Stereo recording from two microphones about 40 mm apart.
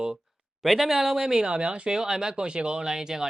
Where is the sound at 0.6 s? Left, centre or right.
Centre.